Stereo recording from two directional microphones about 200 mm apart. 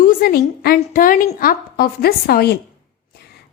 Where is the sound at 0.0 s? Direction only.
45° left (ahead or behind).